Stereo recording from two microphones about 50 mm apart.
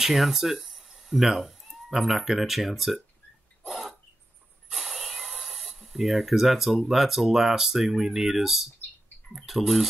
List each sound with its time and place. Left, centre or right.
0.0 s speech: centre
3.6 s cough: centre
4.6 s speech: centre